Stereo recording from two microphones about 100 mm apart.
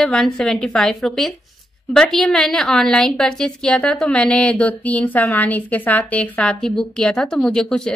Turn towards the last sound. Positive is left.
turn(degrees=5)  # may be behind; listen again after turning